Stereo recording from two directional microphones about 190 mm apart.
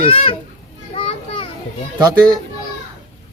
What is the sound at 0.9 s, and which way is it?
Children playing, 25° left (ahead or behind).